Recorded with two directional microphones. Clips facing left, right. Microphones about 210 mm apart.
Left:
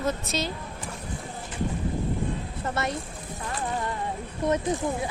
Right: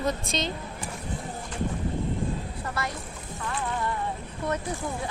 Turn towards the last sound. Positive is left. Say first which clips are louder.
# left 5 dB
turn(degrees=20)  # may be behind; listen again after turning